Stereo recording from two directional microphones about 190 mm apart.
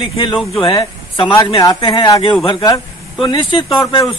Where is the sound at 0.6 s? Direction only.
25° left (ahead or behind).